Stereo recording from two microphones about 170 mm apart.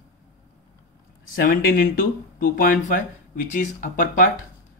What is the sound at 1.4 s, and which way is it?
Speech, 55° left (ahead or behind).